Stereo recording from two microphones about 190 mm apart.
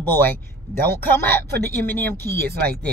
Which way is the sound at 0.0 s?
10° left (ahead or behind).